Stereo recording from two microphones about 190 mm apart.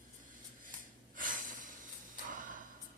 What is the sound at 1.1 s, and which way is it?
Snort, 45° right (ahead or behind).